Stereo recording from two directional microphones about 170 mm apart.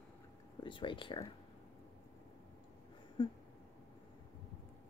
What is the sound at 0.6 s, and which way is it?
Speech, 30° left (ahead or behind).